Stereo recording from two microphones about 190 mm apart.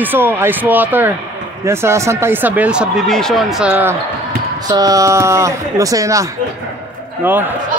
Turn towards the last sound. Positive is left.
turn(degrees=-10)  # may be behind; listen again after turning